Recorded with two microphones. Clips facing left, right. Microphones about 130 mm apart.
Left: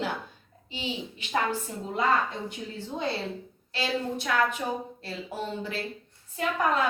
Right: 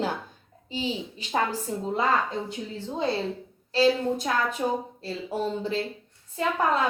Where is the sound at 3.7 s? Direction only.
35° right (ahead or behind).